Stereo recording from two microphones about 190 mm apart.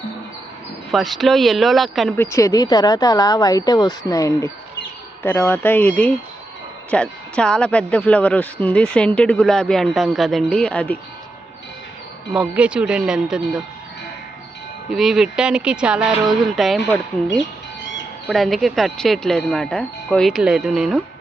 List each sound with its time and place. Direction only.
0.9 s speech: centre (ahead or behind)
2.1 s speech: 15° left (ahead or behind)
12.3 s speech: 5° right (ahead or behind)
14.9 s speech: centre (ahead or behind)
18.3 s speech: centre (ahead or behind)